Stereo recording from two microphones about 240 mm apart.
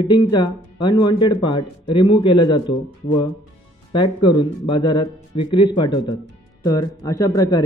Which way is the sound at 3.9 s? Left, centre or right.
Centre.